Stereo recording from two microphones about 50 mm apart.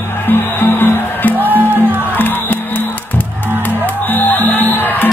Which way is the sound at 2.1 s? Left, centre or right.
Left.